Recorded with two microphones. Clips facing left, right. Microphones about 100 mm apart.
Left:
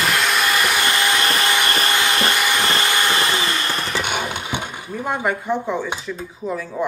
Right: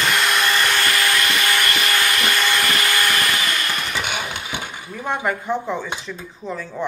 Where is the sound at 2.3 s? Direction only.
15° left (ahead or behind).